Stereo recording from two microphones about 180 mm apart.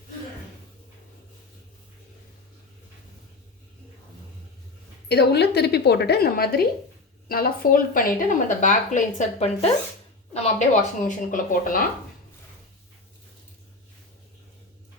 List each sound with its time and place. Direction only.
5.0 s a woman's voice: 65° left (ahead or behind); by 11.8 s 45° left (ahead or behind)